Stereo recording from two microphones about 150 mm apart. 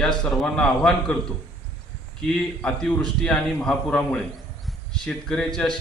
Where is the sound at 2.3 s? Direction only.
5° left (ahead or behind).